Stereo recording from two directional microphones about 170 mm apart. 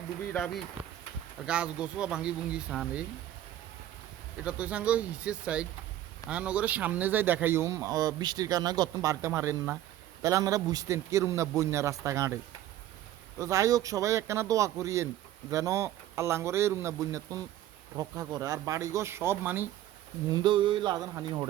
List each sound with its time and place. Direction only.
1.5 s speech: 5° right (ahead or behind)
4.4 s speech: 10° right (ahead or behind)
13.4 s speech: 20° right (ahead or behind)
20.3 s speech: 30° right (ahead or behind)